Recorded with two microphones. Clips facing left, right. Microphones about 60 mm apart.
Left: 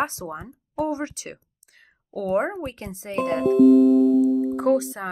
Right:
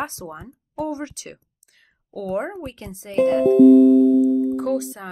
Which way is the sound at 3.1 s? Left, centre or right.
Left.